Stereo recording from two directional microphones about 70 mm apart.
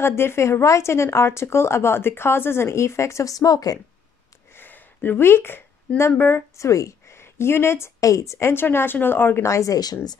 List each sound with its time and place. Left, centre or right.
0.0 s speech: left
4.6 s a sound: left
5.9 s speech: left
6.5 s a woman's voice: left
8.0 s speech: left